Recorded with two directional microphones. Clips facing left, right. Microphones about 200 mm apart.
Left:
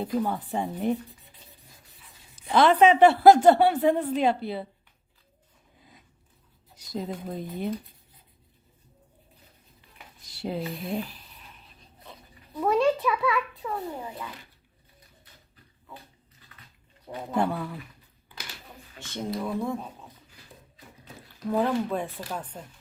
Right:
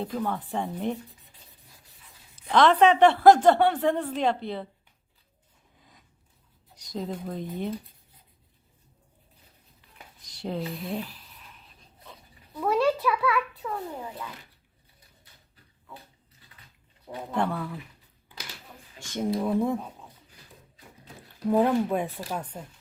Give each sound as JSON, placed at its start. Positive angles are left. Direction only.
{"t": 0.0, "sound": "a woman's voice", "side_deg": 10}
{"t": 6.7, "sound": "speech", "side_deg": 5}
{"t": 10.3, "sound": "speech", "side_deg": 5}
{"t": 12.8, "sound": "a child's voice", "side_deg": 0}
{"t": 17.3, "sound": "speech", "side_deg": 10}
{"t": 18.9, "sound": "speech", "side_deg": -15}
{"t": 21.5, "sound": "speech", "side_deg": -15}